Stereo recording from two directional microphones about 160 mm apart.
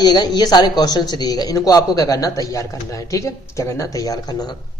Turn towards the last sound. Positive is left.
turn(degrees=25)  # may be behind; listen again after turning